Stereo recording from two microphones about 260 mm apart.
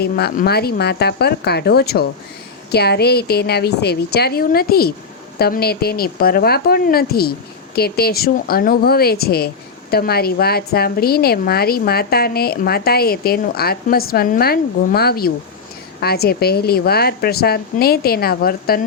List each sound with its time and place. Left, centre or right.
0.0 s a woman's voice: left